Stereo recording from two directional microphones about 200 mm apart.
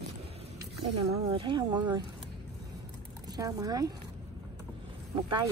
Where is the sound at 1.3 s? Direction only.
25° right (ahead or behind).